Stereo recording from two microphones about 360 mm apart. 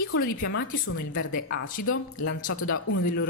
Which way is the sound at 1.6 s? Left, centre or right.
Left.